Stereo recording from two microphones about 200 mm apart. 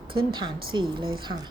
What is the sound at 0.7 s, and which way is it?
Speech, 65° right (ahead or behind).